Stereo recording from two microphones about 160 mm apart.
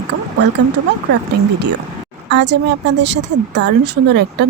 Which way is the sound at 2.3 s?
90° right.